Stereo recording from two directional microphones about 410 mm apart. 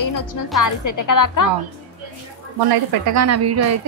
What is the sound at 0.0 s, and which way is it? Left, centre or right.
A woman's voice, left.